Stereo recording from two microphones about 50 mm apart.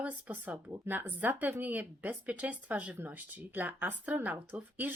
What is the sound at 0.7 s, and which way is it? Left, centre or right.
Speech, right.